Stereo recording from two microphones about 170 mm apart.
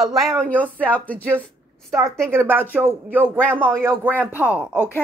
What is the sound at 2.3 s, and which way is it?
A woman's voice, 15° right (ahead or behind).